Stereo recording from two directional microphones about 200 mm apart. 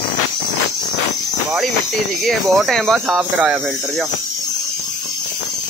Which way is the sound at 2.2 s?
Centre (ahead or behind).